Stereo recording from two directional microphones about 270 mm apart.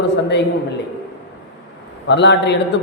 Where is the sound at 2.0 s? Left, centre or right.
Left.